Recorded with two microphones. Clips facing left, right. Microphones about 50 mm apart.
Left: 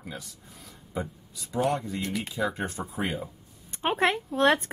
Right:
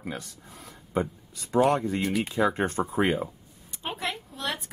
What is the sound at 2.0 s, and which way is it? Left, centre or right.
Speech, centre.